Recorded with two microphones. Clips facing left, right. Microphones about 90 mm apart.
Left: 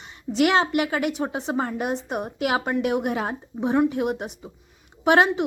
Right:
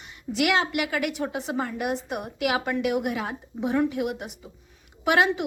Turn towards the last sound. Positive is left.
turn(degrees=30)  # may be behind; listen again after turning